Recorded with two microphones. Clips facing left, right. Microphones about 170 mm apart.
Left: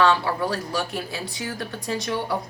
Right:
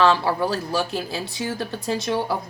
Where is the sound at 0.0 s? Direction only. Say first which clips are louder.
Right 2 dB; 30° right (ahead or behind).